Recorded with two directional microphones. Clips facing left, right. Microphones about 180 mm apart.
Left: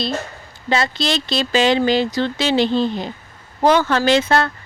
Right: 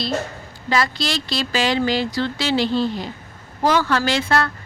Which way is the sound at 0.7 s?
25° left (ahead or behind).